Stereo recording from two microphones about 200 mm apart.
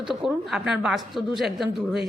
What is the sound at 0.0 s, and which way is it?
A woman's voice, centre (ahead or behind).